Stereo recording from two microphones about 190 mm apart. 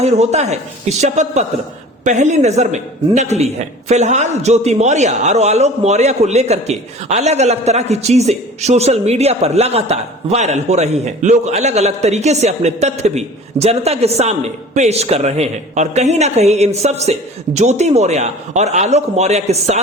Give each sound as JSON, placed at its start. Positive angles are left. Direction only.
{"t": 0.0, "sound": "speech", "side_deg": -35}